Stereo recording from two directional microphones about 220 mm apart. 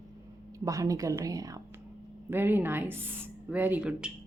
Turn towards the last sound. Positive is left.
turn(degrees=-5)  # may be behind; listen again after turning